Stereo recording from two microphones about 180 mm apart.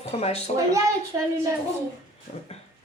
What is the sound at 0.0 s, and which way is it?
Speech, 35° left (ahead or behind).